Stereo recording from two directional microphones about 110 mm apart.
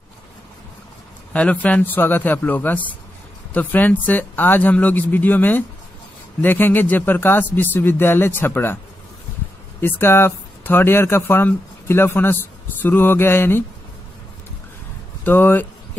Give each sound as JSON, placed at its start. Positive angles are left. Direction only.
{"t": 1.3, "sound": "speech", "side_deg": 15}
{"t": 9.8, "sound": "speech", "side_deg": 20}
{"t": 15.2, "sound": "speech", "side_deg": 15}